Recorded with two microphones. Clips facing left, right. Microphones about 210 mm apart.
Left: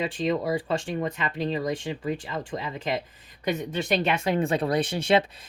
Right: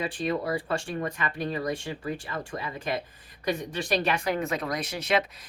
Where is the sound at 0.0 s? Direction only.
20° left (ahead or behind).